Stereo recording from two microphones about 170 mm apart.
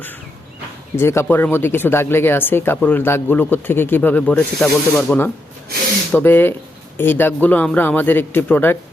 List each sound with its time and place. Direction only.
0.9 s speech: 15° left (ahead or behind)